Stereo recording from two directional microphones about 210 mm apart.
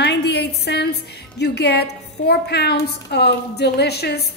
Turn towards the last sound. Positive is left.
turn(degrees=50)  # may be behind; listen again after turning